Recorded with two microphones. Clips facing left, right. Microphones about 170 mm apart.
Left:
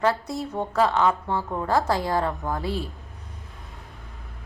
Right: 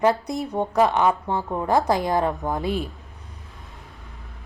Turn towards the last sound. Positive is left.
turn(degrees=0)  # may be behind; listen again after turning